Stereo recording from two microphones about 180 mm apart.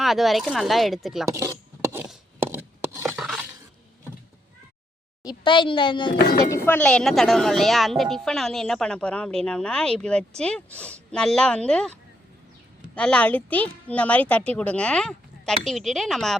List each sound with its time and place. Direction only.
0.0 s a woman's voice: centre (ahead or behind)
1.3 s wood: 15° right (ahead or behind)
3.2 s a sound: centre (ahead or behind)
5.2 s a child's voice: 25° left (ahead or behind)
6.4 s a woman's voice: 15° left (ahead or behind)
13.0 s a woman's voice: 5° left (ahead or behind)